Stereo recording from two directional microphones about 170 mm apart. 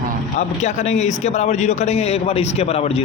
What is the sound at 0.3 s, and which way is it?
A man's voice, 40° left (ahead or behind).